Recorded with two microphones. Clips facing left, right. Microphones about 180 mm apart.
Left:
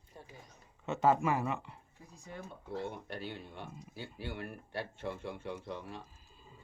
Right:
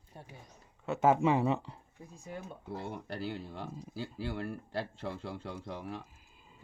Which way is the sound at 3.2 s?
90° right.